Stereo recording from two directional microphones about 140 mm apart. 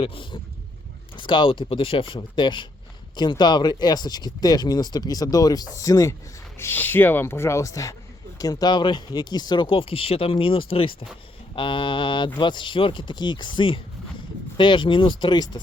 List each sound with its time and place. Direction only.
0.0 s speech: 40° left (ahead or behind)